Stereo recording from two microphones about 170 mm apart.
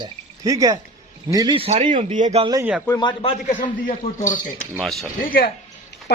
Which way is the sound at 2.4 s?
25° right (ahead or behind).